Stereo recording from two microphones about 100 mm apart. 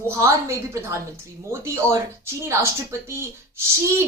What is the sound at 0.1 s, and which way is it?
A woman's voice, 30° right (ahead or behind).